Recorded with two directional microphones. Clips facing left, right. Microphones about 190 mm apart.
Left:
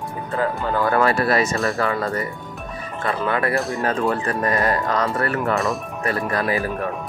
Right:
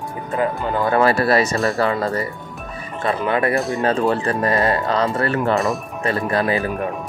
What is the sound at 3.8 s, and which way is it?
Speech, 30° right (ahead or behind).